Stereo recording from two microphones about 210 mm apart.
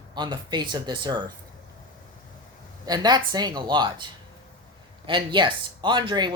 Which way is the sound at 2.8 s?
20° right (ahead or behind).